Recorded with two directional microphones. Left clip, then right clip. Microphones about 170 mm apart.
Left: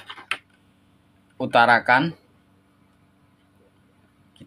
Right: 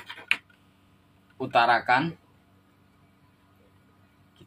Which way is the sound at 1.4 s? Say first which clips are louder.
Left 5 dB; 90° left.